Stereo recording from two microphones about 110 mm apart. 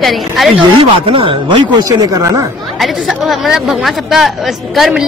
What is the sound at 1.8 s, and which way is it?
Speech, 30° right (ahead or behind).